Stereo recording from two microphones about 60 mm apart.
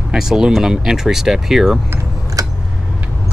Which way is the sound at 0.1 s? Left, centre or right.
Centre.